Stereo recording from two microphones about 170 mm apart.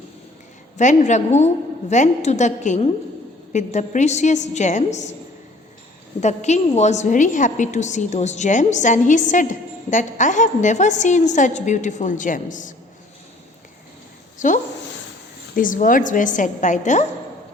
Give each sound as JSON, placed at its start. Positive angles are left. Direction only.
{"t": 0.8, "sound": "a woman's voice", "side_deg": 45}
{"t": 6.1, "sound": "a woman's voice", "side_deg": 40}
{"t": 14.3, "sound": "a woman's voice", "side_deg": 50}